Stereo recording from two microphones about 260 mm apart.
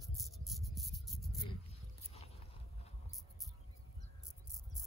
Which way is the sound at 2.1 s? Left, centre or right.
Left.